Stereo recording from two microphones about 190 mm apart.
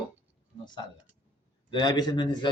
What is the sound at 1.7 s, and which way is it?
Speech, 20° left (ahead or behind).